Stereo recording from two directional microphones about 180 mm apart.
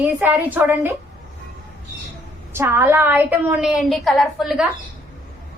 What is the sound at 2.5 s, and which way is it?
A woman's voice, 15° right (ahead or behind).